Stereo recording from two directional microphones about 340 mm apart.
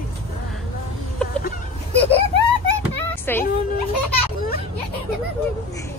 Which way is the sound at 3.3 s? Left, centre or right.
Centre.